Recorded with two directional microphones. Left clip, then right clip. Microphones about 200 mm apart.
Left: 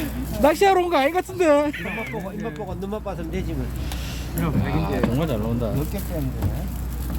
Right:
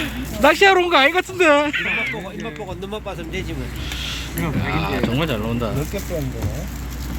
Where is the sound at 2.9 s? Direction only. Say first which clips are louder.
Right 2 dB; 40° left (ahead or behind).